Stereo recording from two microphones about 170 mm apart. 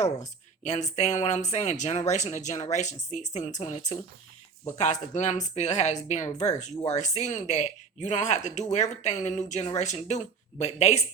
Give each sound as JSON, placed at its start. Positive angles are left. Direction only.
{"t": 0.0, "sound": "speech", "side_deg": 45}